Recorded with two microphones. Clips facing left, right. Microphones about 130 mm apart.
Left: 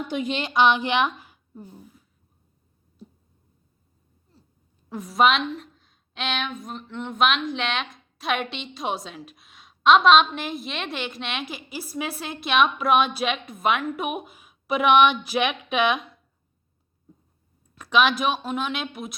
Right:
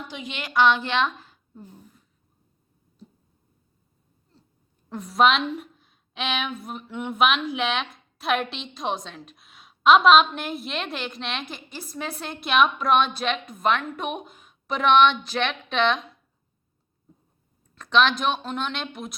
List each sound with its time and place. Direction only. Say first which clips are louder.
0.1 s speech: left 10 dB; 50° left (ahead or behind)
0.3 s a woman's voice: even; 20° left (ahead or behind); by 2.0 s 5° left (ahead or behind)
4.9 s speech: even; centre (ahead or behind)
17.7 s speech: even; 5° left (ahead or behind)